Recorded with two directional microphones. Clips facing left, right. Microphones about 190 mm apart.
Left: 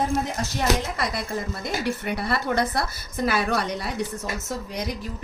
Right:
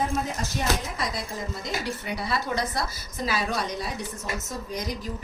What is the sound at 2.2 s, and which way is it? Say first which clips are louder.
A woman's voice: left 3 dB; 60° left (ahead or behind).